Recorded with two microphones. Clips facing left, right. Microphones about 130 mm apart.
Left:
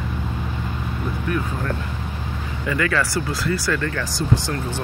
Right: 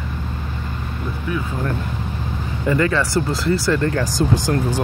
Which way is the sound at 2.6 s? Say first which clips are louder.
Right 4 dB; 30° right (ahead or behind).